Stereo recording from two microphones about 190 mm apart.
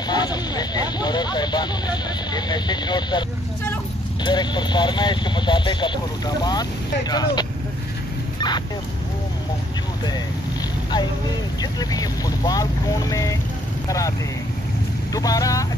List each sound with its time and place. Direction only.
0.1 s speech: 20° left (ahead or behind)
11.6 s speech: 20° left (ahead or behind)
15.1 s speech: 20° left (ahead or behind)